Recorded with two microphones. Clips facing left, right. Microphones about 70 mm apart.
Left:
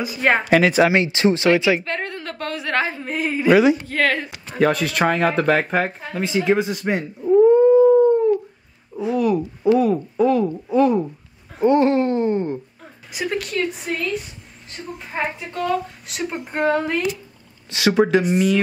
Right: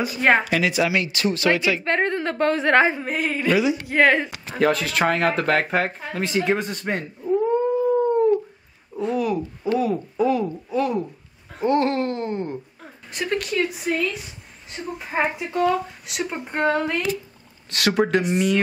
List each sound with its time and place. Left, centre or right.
0.0 s speech: centre
0.5 s speech: left
1.9 s a woman's voice: right
3.0 s speech: centre
3.8 s a woman's voice: centre
4.6 s a woman's voice: centre